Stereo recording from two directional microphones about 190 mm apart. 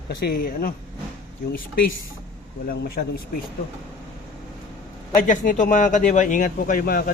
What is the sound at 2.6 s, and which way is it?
Speech, 55° left (ahead or behind).